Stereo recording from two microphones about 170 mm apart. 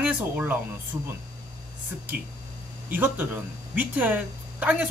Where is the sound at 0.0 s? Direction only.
10° right (ahead or behind).